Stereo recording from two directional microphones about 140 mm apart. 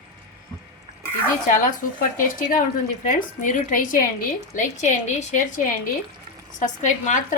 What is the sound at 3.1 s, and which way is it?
Speech, 65° left (ahead or behind).